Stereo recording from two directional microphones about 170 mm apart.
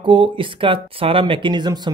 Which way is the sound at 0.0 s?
30° right (ahead or behind).